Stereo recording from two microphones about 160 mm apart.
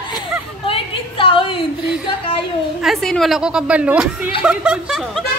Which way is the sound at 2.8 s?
Centre (ahead or behind).